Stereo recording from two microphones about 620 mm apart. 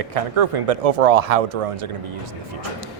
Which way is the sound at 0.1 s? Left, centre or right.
Right.